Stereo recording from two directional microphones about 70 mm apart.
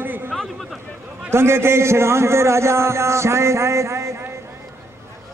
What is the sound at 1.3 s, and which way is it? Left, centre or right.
A man's voice, right.